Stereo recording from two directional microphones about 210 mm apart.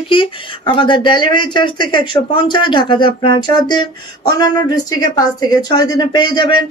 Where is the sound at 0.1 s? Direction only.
25° left (ahead or behind).